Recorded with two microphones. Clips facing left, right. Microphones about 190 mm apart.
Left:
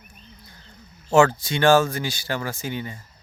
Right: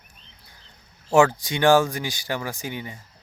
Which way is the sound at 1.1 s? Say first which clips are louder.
Left 1 dB; 15° right (ahead or behind).